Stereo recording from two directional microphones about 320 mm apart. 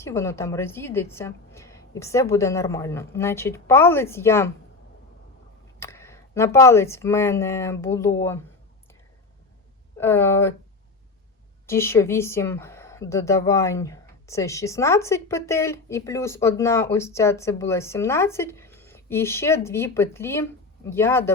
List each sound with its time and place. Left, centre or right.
0.0 s speech: centre
5.8 s speech: centre
10.0 s speech: centre
11.6 s speech: centre